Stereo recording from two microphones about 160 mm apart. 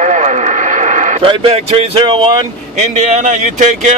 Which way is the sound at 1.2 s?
35° right (ahead or behind).